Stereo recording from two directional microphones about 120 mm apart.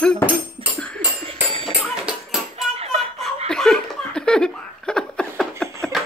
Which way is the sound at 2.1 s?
10° right (ahead or behind).